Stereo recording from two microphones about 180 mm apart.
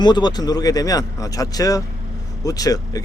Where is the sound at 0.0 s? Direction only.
25° left (ahead or behind).